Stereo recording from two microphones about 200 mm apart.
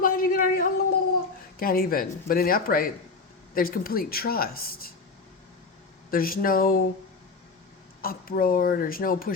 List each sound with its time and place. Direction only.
0.0 s a sound: 45° left (ahead or behind)
1.5 s speech: 50° left (ahead or behind)
6.1 s speech: 45° left (ahead or behind)
8.0 s speech: 45° left (ahead or behind)